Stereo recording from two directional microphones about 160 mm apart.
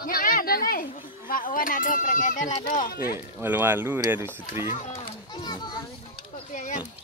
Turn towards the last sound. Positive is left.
turn(degrees=55)  # may be behind; listen again after turning